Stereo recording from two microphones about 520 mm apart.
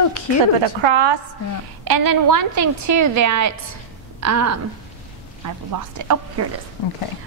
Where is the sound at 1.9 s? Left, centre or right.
Right.